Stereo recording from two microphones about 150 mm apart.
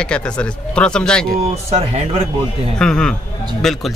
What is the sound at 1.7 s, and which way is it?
Speech, 45° right (ahead or behind).